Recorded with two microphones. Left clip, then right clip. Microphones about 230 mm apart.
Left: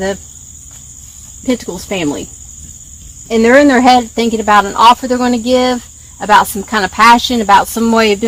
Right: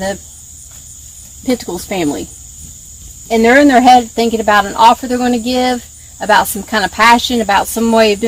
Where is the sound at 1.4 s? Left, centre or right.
Centre.